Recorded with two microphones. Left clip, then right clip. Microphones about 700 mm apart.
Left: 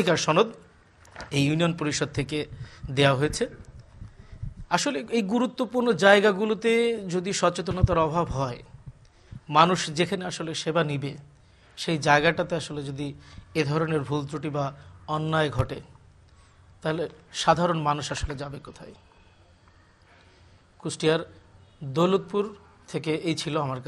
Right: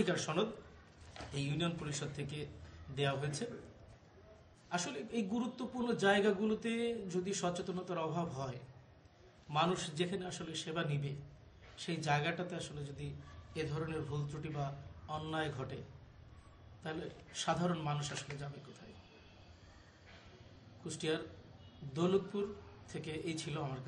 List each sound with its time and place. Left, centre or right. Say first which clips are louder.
0.0 s a man's voice: left 14 dB; left
4.6 s a man's voice: left 15 dB; left
16.8 s a man's voice: left 15 dB; left
20.8 s a man's voice: left 14 dB; left